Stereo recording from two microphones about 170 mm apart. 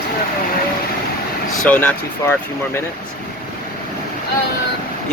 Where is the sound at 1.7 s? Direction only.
10° left (ahead or behind).